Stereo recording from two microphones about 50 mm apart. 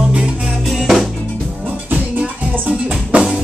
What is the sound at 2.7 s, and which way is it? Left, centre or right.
Music, centre.